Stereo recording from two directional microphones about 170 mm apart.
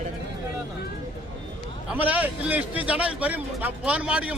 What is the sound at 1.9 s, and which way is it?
A man's voice, 10° right (ahead or behind).